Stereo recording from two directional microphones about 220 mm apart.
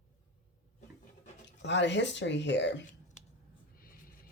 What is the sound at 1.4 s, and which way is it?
Speech, 55° left (ahead or behind).